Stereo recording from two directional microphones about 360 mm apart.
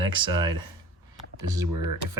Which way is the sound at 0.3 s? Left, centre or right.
Centre.